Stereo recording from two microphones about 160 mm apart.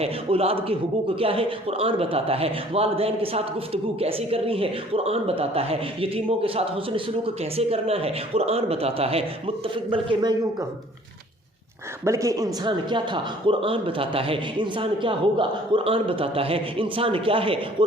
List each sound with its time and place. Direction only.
0.0 s a man's voice: 40° right (ahead or behind)
12.0 s a man's voice: 20° right (ahead or behind)